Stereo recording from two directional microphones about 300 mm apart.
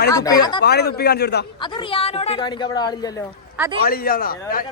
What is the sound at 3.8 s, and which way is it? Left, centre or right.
Speech, left.